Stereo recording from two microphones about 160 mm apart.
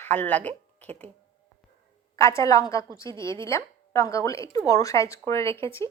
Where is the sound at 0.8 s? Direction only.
40° right (ahead or behind).